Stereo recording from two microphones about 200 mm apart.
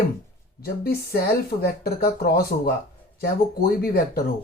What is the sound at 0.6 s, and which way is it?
Speech, 50° left (ahead or behind).